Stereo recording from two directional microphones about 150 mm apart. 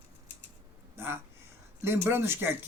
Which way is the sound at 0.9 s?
15° right (ahead or behind).